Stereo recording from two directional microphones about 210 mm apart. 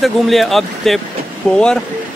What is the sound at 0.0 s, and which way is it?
Speech, centre (ahead or behind).